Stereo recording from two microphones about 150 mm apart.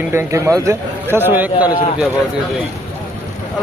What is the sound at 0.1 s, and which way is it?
A man's voice, 20° right (ahead or behind).